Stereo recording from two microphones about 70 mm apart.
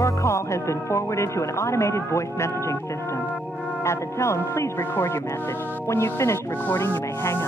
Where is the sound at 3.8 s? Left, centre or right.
Left.